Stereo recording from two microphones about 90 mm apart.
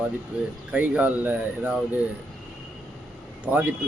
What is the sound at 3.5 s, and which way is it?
Speech, 20° right (ahead or behind).